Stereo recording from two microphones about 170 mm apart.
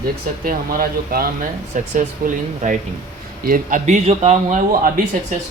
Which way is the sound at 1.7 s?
50° right (ahead or behind).